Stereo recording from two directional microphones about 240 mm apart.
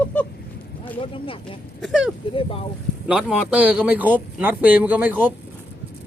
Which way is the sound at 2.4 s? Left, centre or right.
Left.